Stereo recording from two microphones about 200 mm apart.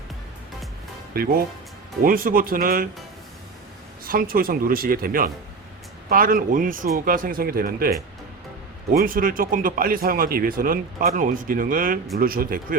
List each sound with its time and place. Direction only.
1.1 s speech: 50° right (ahead or behind)
4.0 s speech: 45° right (ahead or behind)